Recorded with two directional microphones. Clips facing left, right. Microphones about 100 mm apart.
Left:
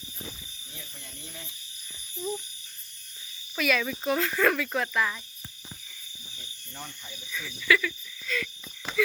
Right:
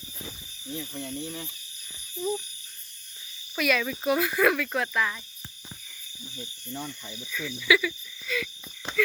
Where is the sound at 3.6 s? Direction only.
Centre (ahead or behind).